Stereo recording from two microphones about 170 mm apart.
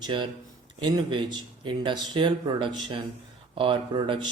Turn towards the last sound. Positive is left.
turn(degrees=-30)  # may be behind; listen again after turning